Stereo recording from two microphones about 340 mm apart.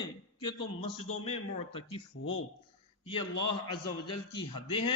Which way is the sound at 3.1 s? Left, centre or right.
Left.